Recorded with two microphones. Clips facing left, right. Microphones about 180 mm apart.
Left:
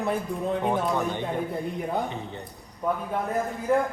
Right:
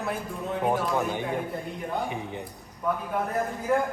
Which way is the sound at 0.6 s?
5° right (ahead or behind).